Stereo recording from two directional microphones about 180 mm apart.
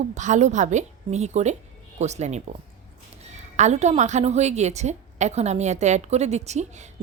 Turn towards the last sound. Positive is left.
turn(degrees=-40)  # may be behind; listen again after turning